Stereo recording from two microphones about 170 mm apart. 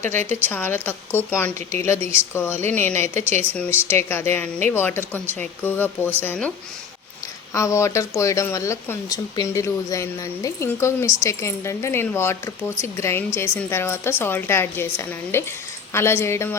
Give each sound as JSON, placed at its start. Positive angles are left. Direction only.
{"t": 0.0, "sound": "speech", "side_deg": 15}
{"t": 7.5, "sound": "speech", "side_deg": 15}